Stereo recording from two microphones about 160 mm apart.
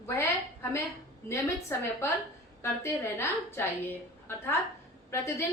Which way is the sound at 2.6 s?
15° left (ahead or behind).